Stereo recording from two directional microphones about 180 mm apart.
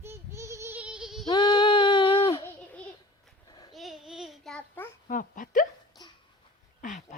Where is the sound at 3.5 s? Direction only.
25° left (ahead or behind).